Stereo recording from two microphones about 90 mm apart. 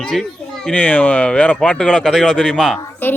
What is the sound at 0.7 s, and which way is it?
Speech, 15° left (ahead or behind).